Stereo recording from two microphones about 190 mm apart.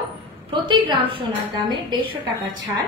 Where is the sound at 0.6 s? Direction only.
25° right (ahead or behind).